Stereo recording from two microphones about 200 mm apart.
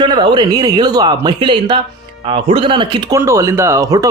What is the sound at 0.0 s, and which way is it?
Speech, 20° right (ahead or behind).